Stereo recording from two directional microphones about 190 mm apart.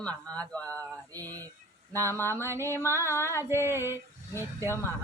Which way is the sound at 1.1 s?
20° right (ahead or behind).